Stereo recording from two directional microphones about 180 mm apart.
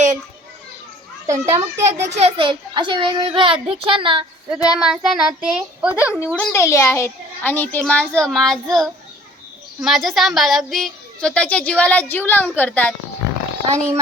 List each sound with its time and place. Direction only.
1.3 s a child's voice: 15° right (ahead or behind)
2.1 s a child's voice: 30° right (ahead or behind)
4.8 s a woman's voice: 5° right (ahead or behind)
6.1 s a child's voice: 10° left (ahead or behind)
13.7 s a child's voice: 15° right (ahead or behind)